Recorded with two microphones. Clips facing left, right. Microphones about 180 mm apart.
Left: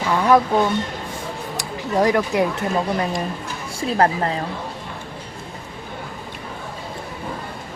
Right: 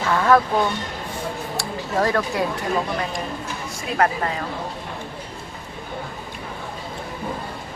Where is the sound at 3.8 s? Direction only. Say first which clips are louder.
Left 3 dB; 30° left (ahead or behind).